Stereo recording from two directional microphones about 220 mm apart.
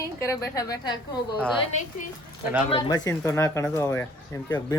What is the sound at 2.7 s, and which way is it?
Speech, 20° left (ahead or behind).